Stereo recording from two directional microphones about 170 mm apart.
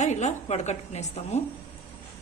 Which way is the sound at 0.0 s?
45° left (ahead or behind).